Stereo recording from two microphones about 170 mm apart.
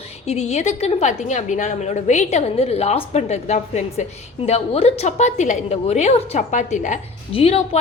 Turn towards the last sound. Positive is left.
turn(degrees=35)  # may be behind; listen again after turning